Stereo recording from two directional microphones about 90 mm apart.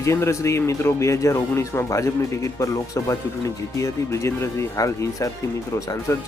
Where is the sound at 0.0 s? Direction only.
35° left (ahead or behind).